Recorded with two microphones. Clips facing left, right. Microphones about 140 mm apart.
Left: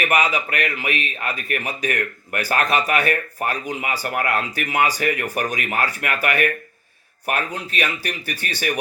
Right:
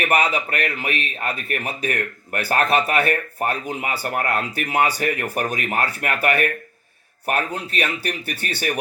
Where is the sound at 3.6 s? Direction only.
45° right (ahead or behind).